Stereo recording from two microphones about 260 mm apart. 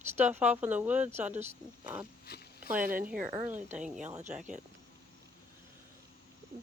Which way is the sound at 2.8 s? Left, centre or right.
Right.